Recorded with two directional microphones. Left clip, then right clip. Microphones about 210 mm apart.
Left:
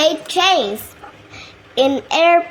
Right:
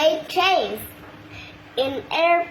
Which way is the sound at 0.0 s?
55° left (ahead or behind).